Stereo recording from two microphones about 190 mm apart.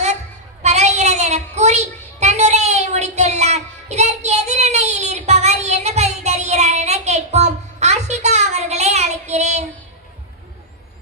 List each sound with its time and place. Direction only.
0.6 s child singing: 35° right (ahead or behind)